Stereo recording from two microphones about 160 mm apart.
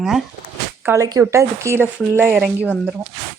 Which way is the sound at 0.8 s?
15° right (ahead or behind).